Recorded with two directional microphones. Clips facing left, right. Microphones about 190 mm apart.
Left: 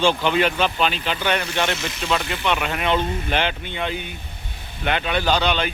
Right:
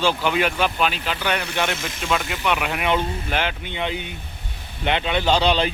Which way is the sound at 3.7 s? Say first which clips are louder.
Even; 15° right (ahead or behind).